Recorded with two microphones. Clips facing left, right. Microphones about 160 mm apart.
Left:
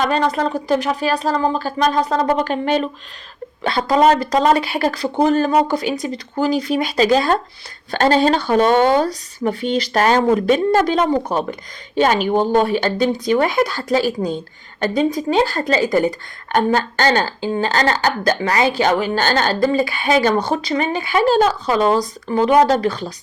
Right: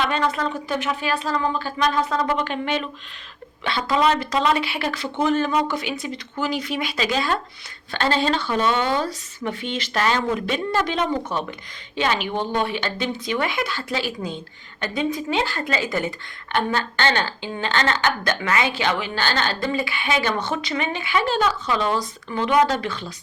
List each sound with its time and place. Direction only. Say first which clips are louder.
0.0 s a woman's voice: left 5 dB; 40° left (ahead or behind)